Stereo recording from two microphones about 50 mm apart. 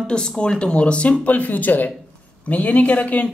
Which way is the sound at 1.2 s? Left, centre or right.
Left.